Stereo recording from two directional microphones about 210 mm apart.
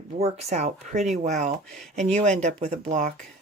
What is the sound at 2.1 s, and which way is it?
Speech, 35° right (ahead or behind).